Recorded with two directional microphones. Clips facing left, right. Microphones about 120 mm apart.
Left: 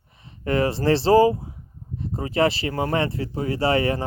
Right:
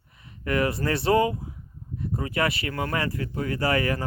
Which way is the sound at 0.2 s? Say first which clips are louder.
Left 3 dB; 30° left (ahead or behind).